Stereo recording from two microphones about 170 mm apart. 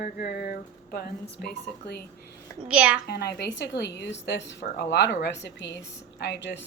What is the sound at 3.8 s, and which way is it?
A woman's voice, 80° left.